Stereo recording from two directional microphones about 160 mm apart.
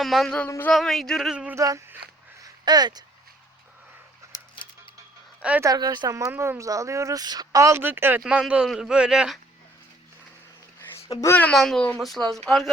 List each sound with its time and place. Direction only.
0.0 s speech: centre (ahead or behind)
0.4 s speech: 15° left (ahead or behind)
0.7 s speech: centre (ahead or behind)
1.5 s speech: 20° right (ahead or behind)
2.4 s a sound: 25° right (ahead or behind)
4.3 s a sound: 30° left (ahead or behind)
5.4 s speech: 10° right (ahead or behind)
5.6 s speech: 25° right (ahead or behind); by 9.4 s 5° right (ahead or behind)
11.2 s speech: 15° left (ahead or behind)
11.5 s speech: centre (ahead or behind)